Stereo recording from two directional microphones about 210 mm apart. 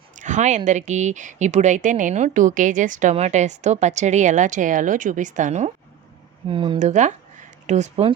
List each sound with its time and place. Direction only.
0.2 s speech: 35° right (ahead or behind)